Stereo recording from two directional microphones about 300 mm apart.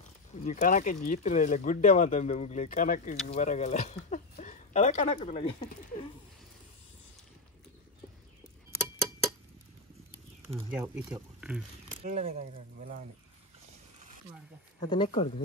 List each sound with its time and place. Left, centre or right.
0.0 s speech: left
10.7 s speech: centre
12.0 s speech: right
14.8 s speech: centre